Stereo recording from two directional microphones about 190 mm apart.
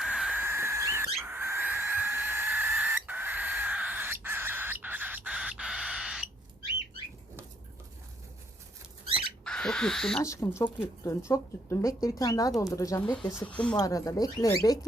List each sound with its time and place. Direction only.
0.0 s dog: 5° right (ahead or behind)
1.2 s owl: 10° right (ahead or behind)
9.4 s speech: 5° left (ahead or behind)
10.2 s speech: 15° left (ahead or behind)
13.7 s speech: 20° left (ahead or behind)